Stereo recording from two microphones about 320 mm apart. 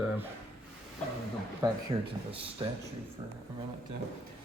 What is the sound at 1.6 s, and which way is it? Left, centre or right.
Speech, centre.